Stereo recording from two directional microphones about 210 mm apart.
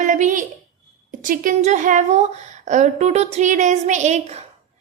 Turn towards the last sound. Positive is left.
turn(degrees=-30)  # may be behind; listen again after turning